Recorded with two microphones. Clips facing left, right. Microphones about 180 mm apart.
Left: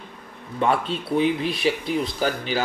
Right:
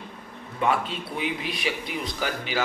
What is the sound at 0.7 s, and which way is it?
A man's voice, 30° left (ahead or behind).